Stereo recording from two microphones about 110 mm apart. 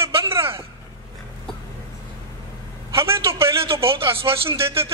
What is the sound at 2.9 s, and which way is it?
A man's voice, 25° right (ahead or behind).